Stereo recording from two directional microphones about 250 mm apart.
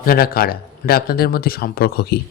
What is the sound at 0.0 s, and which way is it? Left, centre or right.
Speech, left.